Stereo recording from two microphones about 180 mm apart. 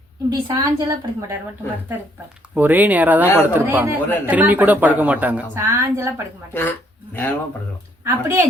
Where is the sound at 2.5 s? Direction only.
10° right (ahead or behind).